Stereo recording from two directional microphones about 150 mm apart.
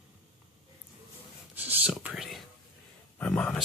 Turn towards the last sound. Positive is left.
turn(degrees=5)  # may be behind; listen again after turning